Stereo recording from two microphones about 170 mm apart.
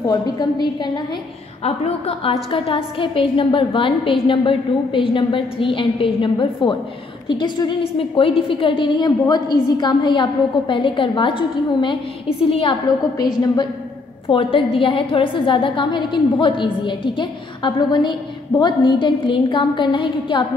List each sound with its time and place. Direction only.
0.0 s a woman's voice: 25° left (ahead or behind)
14.2 s a woman's voice: 30° left (ahead or behind)